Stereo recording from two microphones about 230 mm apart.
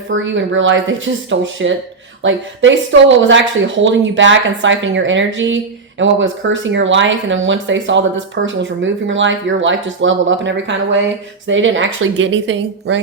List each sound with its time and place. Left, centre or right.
0.1 s a woman's voice: right